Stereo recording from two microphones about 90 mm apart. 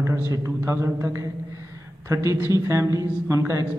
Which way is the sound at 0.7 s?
30° right (ahead or behind).